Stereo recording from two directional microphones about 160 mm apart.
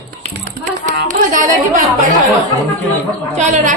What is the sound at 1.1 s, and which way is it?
Music, 55° right (ahead or behind).